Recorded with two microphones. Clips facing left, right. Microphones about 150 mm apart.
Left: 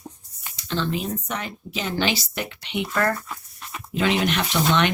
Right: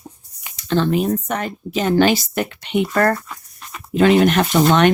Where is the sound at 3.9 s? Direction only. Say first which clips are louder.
Right 9 dB; 50° right (ahead or behind).